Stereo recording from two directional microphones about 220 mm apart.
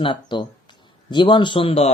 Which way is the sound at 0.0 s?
20° left (ahead or behind).